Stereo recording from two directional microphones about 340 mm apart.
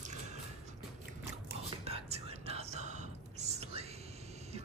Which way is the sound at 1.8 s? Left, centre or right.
Centre.